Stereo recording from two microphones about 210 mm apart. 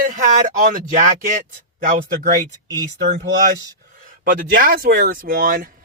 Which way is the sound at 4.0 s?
40° right (ahead or behind).